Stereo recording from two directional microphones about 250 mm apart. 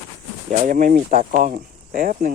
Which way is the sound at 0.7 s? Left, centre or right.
Right.